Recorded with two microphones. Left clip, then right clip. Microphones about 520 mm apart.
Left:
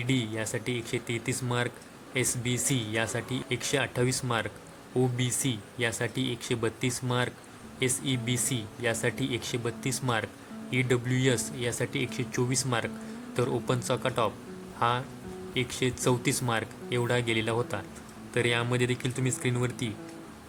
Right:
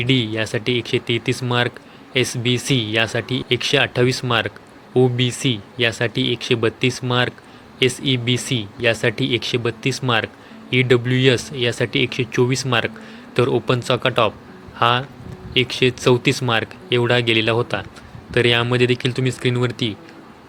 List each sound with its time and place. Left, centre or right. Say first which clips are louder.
0.0 s speech: right 11 dB; left